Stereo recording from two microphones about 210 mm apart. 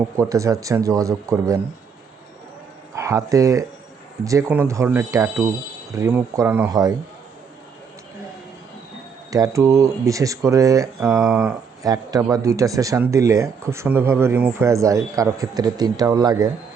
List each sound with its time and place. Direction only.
0.2 s speech: 15° right (ahead or behind)
2.9 s speech: 15° right (ahead or behind)
9.3 s speech: 15° right (ahead or behind)
11.1 s speech: centre (ahead or behind)
11.8 s speech: 15° right (ahead or behind)